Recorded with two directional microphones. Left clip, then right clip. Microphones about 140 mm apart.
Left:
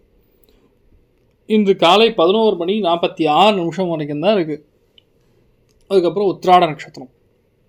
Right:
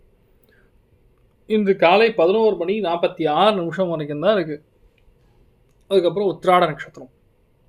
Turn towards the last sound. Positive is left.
turn(degrees=25)  # may be behind; listen again after turning